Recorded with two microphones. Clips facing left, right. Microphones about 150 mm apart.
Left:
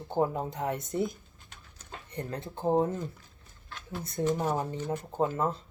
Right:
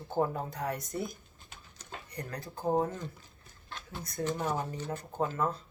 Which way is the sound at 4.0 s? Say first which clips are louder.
Left 4 dB; 25° left (ahead or behind).